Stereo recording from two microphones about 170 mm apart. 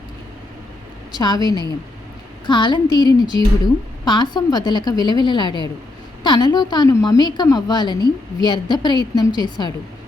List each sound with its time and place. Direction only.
1.1 s a woman's voice: 25° left (ahead or behind)